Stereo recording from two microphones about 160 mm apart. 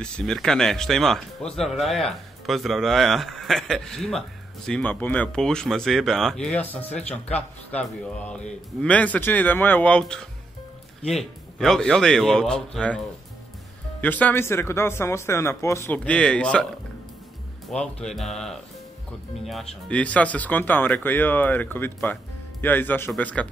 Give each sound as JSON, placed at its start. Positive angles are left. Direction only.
{"t": 0.0, "sound": "speech", "side_deg": 5}
{"t": 14.0, "sound": "speech", "side_deg": 10}
{"t": 16.0, "sound": "speech", "side_deg": 5}
{"t": 17.6, "sound": "speech", "side_deg": 5}